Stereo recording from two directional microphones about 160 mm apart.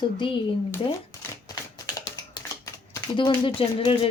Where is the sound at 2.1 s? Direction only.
20° left (ahead or behind).